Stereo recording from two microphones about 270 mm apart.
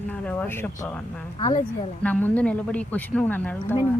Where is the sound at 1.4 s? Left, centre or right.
Left.